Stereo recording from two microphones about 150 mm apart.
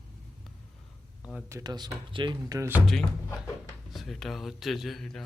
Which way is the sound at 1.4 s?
20° right (ahead or behind).